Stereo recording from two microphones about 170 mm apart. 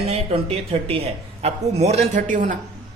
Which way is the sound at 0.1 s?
35° right (ahead or behind).